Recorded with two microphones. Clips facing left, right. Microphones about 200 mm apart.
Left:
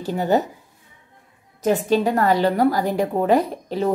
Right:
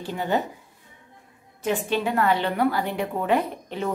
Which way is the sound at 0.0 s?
40° left (ahead or behind).